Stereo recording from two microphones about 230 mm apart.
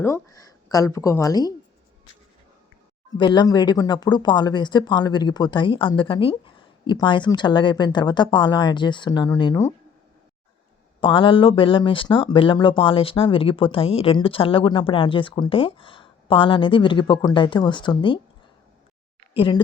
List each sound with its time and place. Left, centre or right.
0.0 s a woman's voice: centre
3.2 s speech: centre
11.0 s speech: left
19.3 s speech: left